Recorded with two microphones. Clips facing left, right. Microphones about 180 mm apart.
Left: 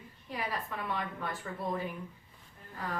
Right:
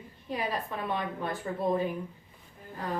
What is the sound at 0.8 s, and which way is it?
Speech, 25° right (ahead or behind).